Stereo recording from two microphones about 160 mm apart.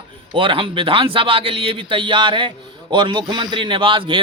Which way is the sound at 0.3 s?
35° right (ahead or behind).